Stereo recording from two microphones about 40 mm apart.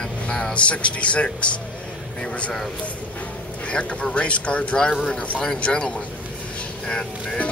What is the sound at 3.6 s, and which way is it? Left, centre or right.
Speech, left.